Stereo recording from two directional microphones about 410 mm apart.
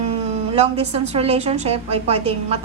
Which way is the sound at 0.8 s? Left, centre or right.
Centre.